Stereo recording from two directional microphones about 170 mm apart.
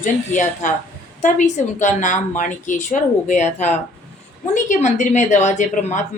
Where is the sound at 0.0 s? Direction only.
50° left (ahead or behind).